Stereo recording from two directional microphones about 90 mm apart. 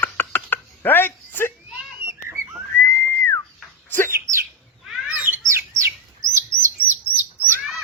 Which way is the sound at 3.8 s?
25° left (ahead or behind).